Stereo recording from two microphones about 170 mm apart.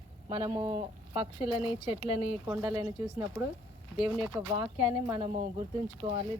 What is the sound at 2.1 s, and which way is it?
Speech, 10° right (ahead or behind).